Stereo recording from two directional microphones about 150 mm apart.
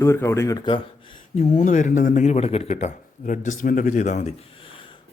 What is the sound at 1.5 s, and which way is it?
Speech, 55° left (ahead or behind).